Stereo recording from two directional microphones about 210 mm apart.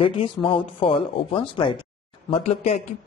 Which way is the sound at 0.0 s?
25° left (ahead or behind).